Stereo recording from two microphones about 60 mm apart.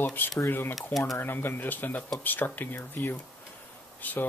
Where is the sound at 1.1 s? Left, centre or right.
Left.